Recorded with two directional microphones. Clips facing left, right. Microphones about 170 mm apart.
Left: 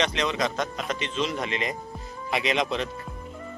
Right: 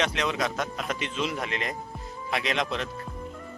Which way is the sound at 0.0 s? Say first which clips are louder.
Left 2 dB; 5° right (ahead or behind).